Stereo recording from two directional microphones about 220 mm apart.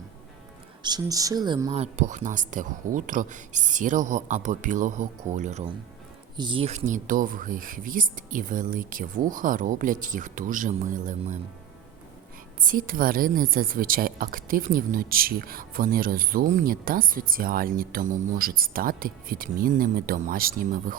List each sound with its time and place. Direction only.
0.8 s speech: 20° right (ahead or behind)
1.7 s speech: 30° right (ahead or behind)
12.6 s speech: 40° right (ahead or behind)